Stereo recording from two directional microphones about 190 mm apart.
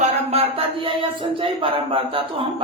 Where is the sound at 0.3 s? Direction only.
35° right (ahead or behind).